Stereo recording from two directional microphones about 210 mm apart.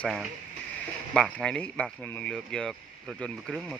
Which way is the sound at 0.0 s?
Centre (ahead or behind).